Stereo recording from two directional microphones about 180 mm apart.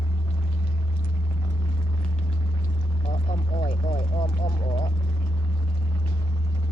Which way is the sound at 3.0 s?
30° left (ahead or behind).